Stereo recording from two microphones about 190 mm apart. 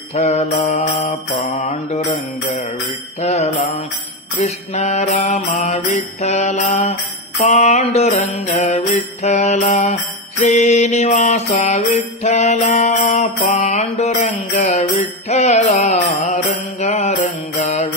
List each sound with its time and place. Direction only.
0.1 s mantra: 35° left (ahead or behind)
3.2 s mantra: 35° left (ahead or behind)